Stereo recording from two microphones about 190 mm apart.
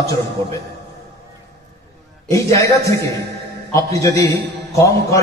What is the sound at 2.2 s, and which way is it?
A man's voice, 15° left (ahead or behind).